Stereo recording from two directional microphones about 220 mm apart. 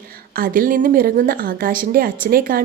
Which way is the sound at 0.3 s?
40° right (ahead or behind).